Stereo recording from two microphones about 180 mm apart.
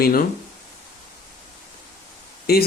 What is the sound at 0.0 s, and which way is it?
Speech, 55° left (ahead or behind).